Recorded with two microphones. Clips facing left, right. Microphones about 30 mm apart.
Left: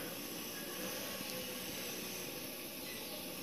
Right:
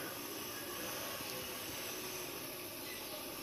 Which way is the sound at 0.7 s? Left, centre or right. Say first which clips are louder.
Even; centre.